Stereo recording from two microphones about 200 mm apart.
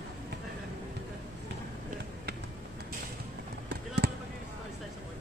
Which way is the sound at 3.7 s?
50° right (ahead or behind).